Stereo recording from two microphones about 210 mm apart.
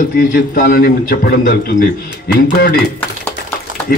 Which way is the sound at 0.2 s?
40° left (ahead or behind).